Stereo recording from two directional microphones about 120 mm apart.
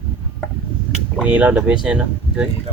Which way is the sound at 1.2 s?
10° right (ahead or behind).